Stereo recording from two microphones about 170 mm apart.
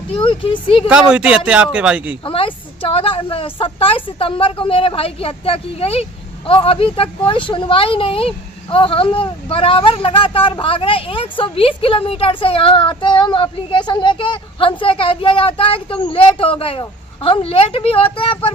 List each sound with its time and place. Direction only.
0.3 s speech: 30° left (ahead or behind)
0.9 s speech: 5° right (ahead or behind)
2.2 s a woman's voice: 30° left (ahead or behind)